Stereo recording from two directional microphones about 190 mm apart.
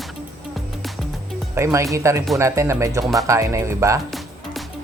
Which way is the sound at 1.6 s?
15° right (ahead or behind).